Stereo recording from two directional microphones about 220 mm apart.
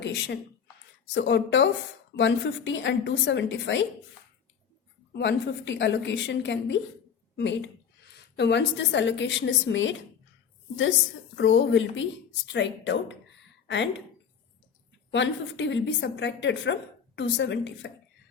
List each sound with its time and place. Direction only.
0.0 s a woman's voice: 50° left (ahead or behind)
5.1 s a woman's voice: 55° left (ahead or behind)
11.3 s a woman's voice: 60° left (ahead or behind)
15.1 s a woman's voice: 55° left (ahead or behind)